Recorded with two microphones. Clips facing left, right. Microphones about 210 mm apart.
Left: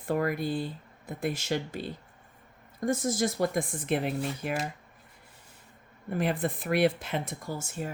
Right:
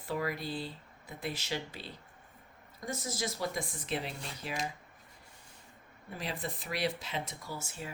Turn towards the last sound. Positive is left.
turn(degrees=50)  # may be behind; listen again after turning